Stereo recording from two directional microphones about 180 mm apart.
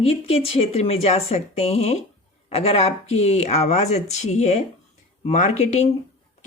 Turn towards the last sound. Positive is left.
turn(degrees=40)  # may be behind; listen again after turning